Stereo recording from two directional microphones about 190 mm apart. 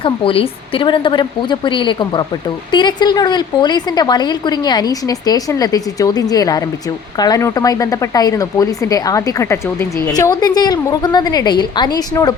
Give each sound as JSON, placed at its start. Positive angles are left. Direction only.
{"t": 0.0, "sound": "a woman's voice", "side_deg": 30}